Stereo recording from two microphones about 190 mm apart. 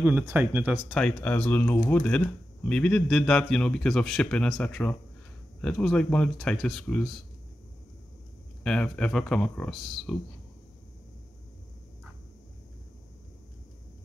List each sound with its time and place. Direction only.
0.0 s speech: 10° right (ahead or behind)
0.8 s speech: 5° left (ahead or behind)
8.6 s speech: 5° left (ahead or behind)